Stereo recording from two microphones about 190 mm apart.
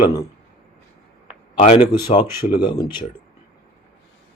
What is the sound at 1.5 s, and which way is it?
Speech, 30° left (ahead or behind).